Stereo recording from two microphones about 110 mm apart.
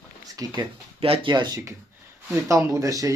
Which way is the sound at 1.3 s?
45° right (ahead or behind).